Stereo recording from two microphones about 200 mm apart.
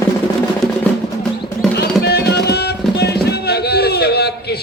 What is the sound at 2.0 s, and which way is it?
Music, 55° left (ahead or behind).